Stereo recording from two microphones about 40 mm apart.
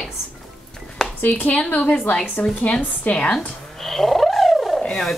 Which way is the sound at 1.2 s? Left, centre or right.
Left.